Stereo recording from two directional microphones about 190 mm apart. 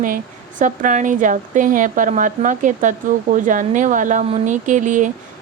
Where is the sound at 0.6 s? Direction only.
40° right (ahead or behind).